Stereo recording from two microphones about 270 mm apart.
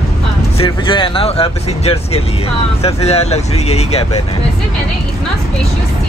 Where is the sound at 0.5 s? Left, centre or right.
Centre.